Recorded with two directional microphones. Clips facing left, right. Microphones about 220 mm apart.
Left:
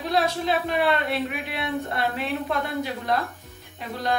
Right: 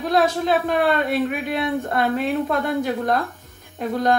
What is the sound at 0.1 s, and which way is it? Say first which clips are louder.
Speech: right 5 dB; 50° right (ahead or behind).